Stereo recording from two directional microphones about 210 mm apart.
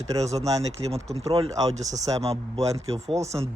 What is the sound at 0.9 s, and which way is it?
Speech, 30° right (ahead or behind).